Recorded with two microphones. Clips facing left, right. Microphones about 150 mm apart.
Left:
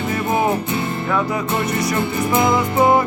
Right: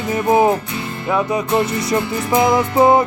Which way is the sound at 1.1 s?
20° right (ahead or behind).